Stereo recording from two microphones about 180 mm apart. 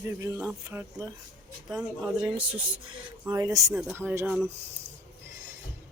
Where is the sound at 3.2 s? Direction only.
20° right (ahead or behind); by 4.5 s 5° right (ahead or behind).